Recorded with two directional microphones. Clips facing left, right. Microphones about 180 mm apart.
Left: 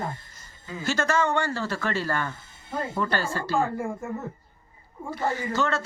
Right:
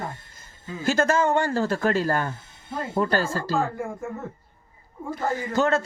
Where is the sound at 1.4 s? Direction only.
45° right (ahead or behind).